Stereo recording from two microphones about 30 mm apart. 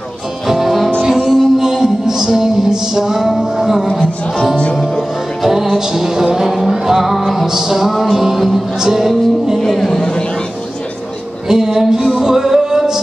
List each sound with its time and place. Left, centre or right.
0.5 s music: centre
5.4 s music: centre
9.8 s a sound: left
11.4 s music: centre